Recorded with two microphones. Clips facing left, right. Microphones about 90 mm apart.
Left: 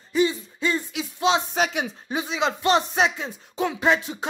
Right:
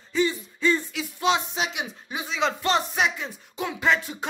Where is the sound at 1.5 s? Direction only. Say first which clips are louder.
Left 5 dB; 45° left (ahead or behind).